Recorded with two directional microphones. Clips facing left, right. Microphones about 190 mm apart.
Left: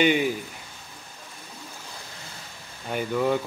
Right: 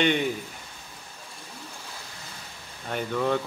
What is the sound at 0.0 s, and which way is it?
Speech, 5° left (ahead or behind).